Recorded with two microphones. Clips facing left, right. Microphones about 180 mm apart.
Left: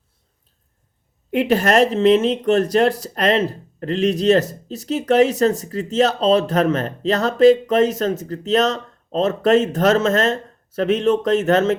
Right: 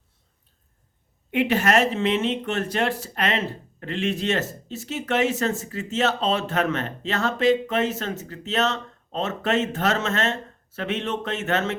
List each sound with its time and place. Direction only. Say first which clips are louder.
1.3 s speech: left 4 dB; 40° left (ahead or behind)